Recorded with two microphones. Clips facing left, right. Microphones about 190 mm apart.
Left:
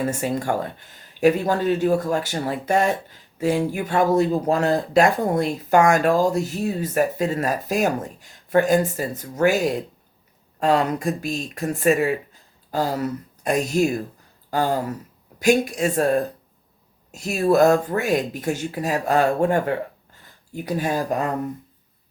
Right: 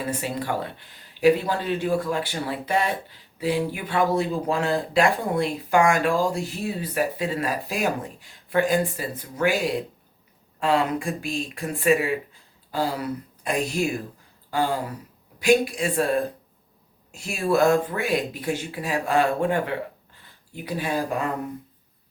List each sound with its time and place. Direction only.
0.0 s speech: 45° left (ahead or behind)